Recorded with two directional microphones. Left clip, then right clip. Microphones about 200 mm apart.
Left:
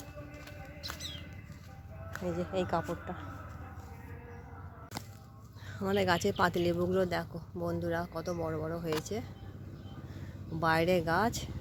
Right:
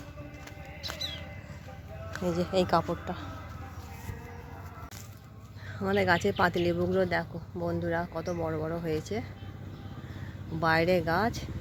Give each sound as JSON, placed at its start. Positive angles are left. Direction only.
{"t": 2.2, "sound": "speech", "side_deg": -20}
{"t": 5.8, "sound": "speech", "side_deg": 5}
{"t": 10.6, "sound": "speech", "side_deg": 10}